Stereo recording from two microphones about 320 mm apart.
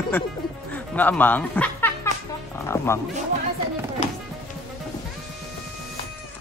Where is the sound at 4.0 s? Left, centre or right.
Left.